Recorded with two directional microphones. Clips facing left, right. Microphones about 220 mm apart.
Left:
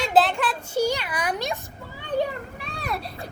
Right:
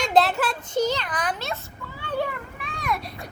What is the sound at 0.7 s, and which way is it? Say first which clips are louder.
Speech: even; 10° left (ahead or behind).